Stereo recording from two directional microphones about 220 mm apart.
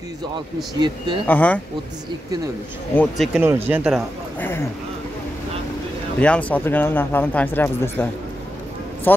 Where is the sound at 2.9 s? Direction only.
Centre (ahead or behind).